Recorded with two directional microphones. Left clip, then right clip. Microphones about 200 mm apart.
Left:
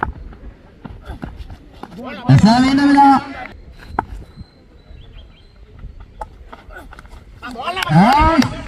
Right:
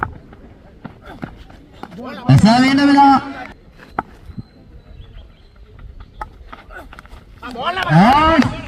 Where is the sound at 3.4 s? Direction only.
35° left (ahead or behind).